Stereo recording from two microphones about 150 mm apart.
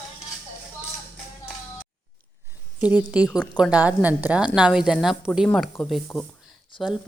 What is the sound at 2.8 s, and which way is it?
Speech, 10° right (ahead or behind).